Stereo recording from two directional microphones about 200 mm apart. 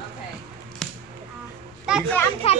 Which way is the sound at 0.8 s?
5° left (ahead or behind).